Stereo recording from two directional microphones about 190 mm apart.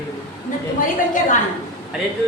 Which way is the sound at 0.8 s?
45° left (ahead or behind).